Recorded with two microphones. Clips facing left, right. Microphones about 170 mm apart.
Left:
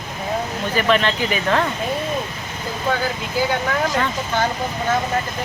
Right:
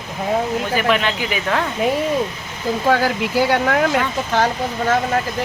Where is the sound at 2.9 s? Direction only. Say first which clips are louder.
Right 5 dB; 80° right.